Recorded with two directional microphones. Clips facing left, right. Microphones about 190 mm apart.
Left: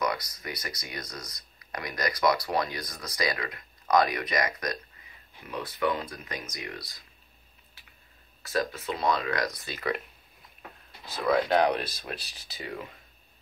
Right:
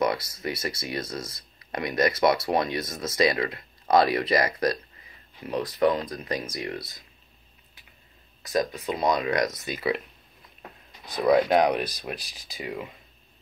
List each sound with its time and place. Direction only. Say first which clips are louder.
0.0 s speech: right 5 dB; 25° right (ahead or behind)
8.4 s speech: right 3 dB; 15° right (ahead or behind)
11.1 s speech: right 4 dB; 15° right (ahead or behind)